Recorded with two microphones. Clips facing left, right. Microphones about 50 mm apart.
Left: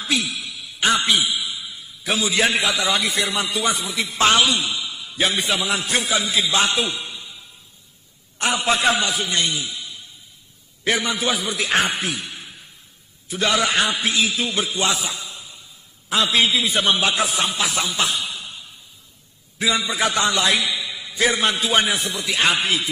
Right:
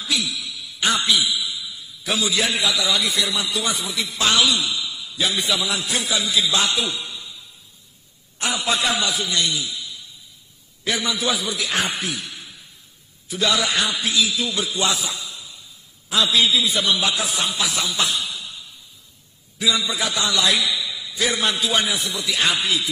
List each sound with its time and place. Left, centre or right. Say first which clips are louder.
0.0 s a man's voice: left 2 dB; left
8.4 s a man's voice: left 2 dB; left